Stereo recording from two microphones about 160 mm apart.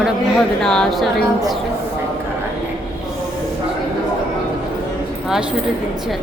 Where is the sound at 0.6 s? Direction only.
5° left (ahead or behind).